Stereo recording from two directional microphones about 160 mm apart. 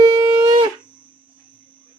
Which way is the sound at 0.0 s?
25° right (ahead or behind).